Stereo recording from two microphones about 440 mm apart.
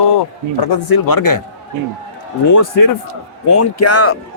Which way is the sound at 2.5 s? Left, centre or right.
Left.